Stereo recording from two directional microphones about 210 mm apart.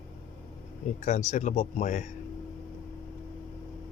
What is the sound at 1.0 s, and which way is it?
Speech, 35° left (ahead or behind).